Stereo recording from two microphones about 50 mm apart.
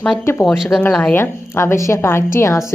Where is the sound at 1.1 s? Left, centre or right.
Left.